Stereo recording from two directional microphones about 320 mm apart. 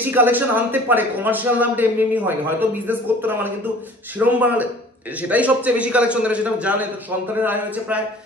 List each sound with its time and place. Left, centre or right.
0.0 s speech: centre